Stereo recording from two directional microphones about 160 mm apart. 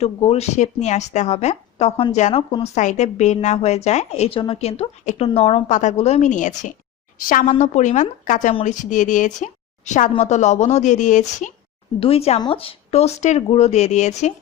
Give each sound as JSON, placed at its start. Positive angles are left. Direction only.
{"t": 0.0, "sound": "a woman's voice", "side_deg": 40}
{"t": 2.8, "sound": "a woman's voice", "side_deg": 50}
{"t": 11.9, "sound": "a woman's voice", "side_deg": 35}